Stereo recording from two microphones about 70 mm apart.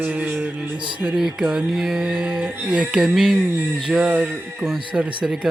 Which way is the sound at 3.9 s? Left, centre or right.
Centre.